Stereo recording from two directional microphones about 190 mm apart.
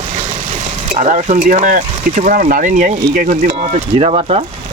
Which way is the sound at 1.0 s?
40° right (ahead or behind).